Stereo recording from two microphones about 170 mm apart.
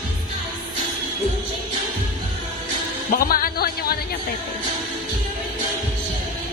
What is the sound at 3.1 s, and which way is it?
Music, 60° left (ahead or behind).